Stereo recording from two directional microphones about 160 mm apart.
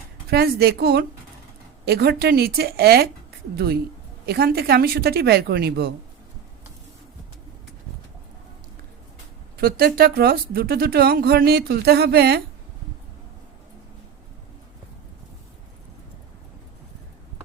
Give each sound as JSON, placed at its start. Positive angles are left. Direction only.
{"t": 0.3, "sound": "a woman's voice", "side_deg": -80}
{"t": 9.6, "sound": "speech", "side_deg": -75}